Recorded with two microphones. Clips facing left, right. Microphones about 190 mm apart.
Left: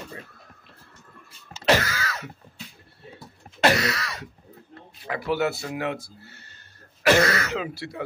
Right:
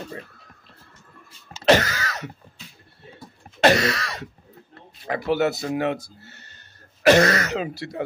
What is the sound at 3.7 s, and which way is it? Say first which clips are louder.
Throat clearing: right 4 dB; 45° right (ahead or behind).